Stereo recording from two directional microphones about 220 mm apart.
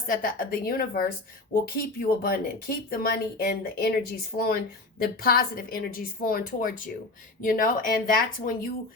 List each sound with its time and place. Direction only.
0.1 s a woman's voice: 40° left (ahead or behind)